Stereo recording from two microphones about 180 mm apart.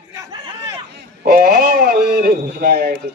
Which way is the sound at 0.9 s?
65° right (ahead or behind).